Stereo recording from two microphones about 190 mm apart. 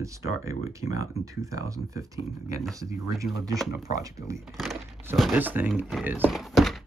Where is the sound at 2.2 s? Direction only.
Centre (ahead or behind).